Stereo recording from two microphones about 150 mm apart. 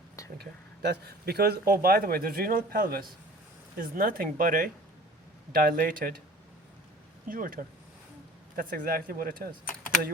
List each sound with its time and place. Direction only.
0.3 s speech: 90° right; by 6.1 s 65° right (ahead or behind)
7.3 s speech: 70° right (ahead or behind)